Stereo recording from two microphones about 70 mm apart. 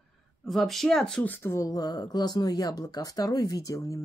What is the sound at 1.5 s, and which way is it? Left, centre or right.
Speech, left.